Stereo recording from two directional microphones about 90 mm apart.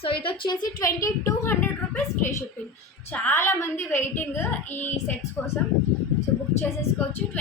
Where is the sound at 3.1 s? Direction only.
20° left (ahead or behind).